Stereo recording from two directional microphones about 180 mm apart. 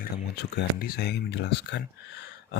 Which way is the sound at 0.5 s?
60° left (ahead or behind).